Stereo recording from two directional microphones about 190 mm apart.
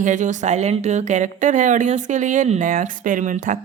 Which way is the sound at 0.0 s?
40° right (ahead or behind).